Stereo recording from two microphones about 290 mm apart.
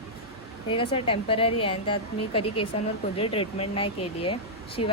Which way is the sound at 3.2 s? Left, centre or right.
Centre.